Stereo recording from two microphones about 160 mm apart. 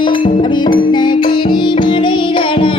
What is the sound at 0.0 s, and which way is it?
Music, 30° left (ahead or behind).